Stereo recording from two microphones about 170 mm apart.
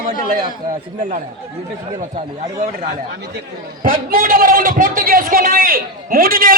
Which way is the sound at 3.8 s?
55° right (ahead or behind).